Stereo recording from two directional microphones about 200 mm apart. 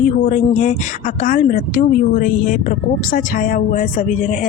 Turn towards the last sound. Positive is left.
turn(degrees=40)  # may be behind; listen again after turning